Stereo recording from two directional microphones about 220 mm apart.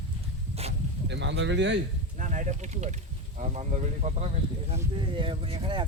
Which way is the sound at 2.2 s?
35° right (ahead or behind).